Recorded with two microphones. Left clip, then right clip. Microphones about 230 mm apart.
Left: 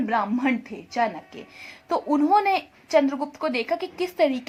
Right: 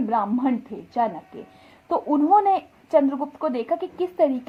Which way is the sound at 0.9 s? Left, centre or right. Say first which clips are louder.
Right 1 dB; centre.